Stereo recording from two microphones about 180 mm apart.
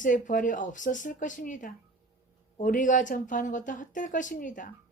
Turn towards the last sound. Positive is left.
turn(degrees=45)  # may be behind; listen again after turning